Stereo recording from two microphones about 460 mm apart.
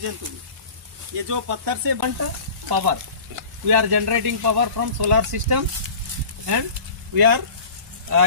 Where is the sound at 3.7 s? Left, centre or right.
Right.